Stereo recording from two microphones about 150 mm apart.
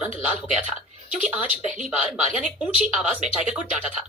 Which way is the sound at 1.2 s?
5° right (ahead or behind).